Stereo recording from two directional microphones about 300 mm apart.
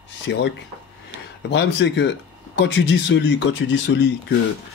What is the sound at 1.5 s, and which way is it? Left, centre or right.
Speech, left.